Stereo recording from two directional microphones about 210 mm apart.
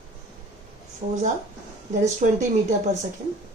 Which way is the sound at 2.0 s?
35° right (ahead or behind).